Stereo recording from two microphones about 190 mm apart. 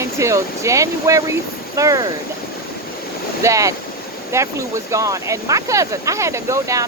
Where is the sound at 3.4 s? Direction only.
15° right (ahead or behind).